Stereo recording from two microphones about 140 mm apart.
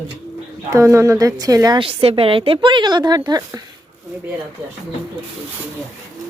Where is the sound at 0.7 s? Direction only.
20° right (ahead or behind).